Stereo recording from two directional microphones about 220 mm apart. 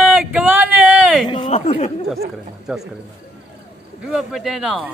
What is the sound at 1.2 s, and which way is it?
Speech, 20° left (ahead or behind).